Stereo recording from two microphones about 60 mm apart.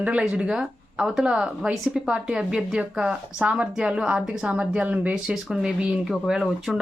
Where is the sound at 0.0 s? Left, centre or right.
Right.